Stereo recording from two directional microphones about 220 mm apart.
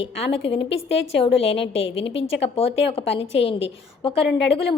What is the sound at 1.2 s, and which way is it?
A woman's voice, 25° left (ahead or behind).